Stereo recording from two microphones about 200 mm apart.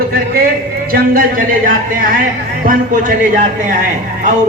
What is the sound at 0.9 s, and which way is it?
Speech, 45° right (ahead or behind).